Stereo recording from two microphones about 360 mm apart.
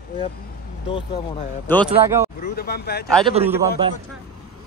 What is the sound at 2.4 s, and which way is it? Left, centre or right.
Speech, left.